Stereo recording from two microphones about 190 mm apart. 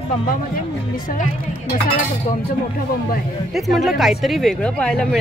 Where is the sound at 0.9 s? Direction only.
45° left (ahead or behind).